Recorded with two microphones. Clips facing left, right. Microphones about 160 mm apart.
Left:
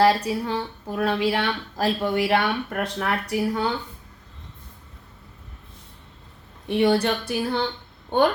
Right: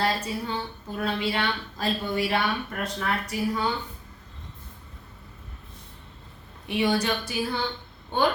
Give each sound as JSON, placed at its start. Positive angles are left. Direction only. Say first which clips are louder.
{"t": 0.0, "sound": "speech", "louder": "left 8 dB", "side_deg": 75}
{"t": 6.7, "sound": "speech", "louder": "left 5 dB", "side_deg": 55}